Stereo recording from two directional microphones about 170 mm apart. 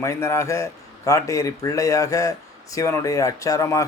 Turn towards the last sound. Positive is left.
turn(degrees=20)  # may be behind; listen again after turning